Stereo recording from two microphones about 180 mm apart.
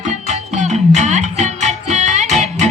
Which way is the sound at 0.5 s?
40° right (ahead or behind).